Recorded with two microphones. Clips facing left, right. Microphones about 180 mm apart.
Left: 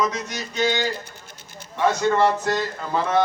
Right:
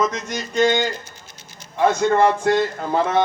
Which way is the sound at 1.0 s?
55° left (ahead or behind).